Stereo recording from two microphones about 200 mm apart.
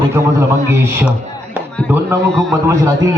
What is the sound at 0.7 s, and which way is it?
Speech, 10° right (ahead or behind).